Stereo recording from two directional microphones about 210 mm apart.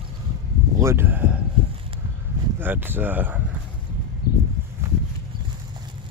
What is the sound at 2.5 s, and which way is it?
Speech, 10° right (ahead or behind).